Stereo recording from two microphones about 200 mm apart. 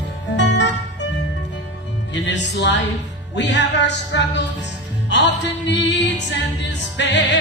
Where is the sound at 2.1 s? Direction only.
60° left (ahead or behind).